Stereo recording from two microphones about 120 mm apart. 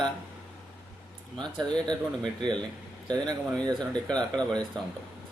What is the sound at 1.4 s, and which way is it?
Speech, 40° right (ahead or behind).